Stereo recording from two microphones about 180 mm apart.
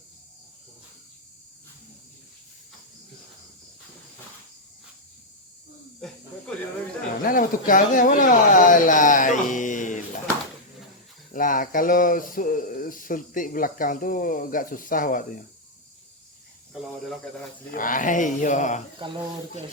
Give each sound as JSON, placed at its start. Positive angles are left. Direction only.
{"t": 7.2, "sound": "speech", "side_deg": 50}
{"t": 11.3, "sound": "speech", "side_deg": 50}
{"t": 17.7, "sound": "speech", "side_deg": 50}